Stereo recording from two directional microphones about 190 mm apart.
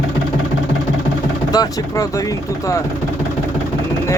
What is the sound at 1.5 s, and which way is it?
Speech, 20° left (ahead or behind).